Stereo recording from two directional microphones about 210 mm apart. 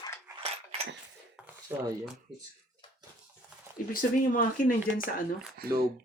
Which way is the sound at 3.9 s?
40° left (ahead or behind).